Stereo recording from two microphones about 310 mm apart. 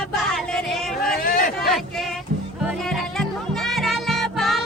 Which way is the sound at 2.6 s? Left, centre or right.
Centre.